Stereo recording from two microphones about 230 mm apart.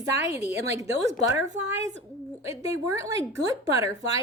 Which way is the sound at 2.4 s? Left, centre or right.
Centre.